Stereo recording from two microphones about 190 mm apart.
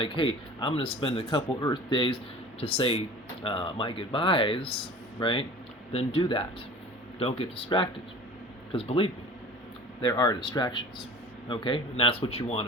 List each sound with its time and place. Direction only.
0.0 s speech: 25° left (ahead or behind)
10.0 s speech: 20° left (ahead or behind)